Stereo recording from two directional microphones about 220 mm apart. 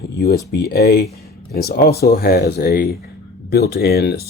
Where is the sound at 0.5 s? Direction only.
45° left (ahead or behind).